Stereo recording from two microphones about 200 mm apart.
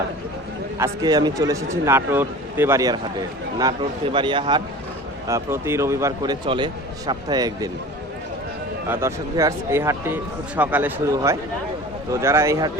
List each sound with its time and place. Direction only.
0.8 s speech: 20° right (ahead or behind)
8.9 s speech: 15° right (ahead or behind)